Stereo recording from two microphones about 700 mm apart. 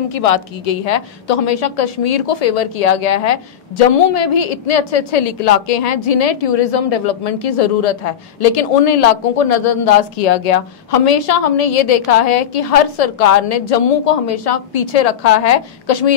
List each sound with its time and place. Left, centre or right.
0.1 s a woman's voice: left